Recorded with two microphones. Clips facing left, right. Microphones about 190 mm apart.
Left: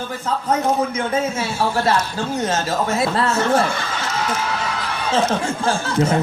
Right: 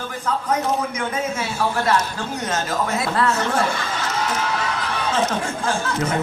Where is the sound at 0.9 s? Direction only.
25° left (ahead or behind).